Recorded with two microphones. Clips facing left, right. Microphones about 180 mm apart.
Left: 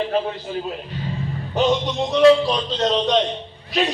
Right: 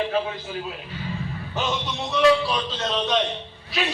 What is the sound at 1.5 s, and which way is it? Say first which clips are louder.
Speech: left 9 dB; 35° left (ahead or behind).